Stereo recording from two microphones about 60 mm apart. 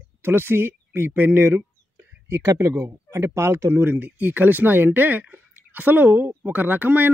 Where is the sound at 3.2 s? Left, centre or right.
Right.